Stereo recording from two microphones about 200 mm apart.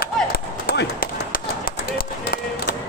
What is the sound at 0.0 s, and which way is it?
Run, 50° left (ahead or behind).